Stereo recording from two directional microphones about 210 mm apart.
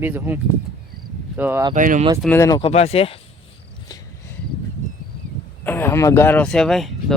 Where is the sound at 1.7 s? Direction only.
40° right (ahead or behind).